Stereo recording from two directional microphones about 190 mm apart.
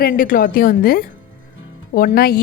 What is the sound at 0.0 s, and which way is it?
Speech, 50° left (ahead or behind).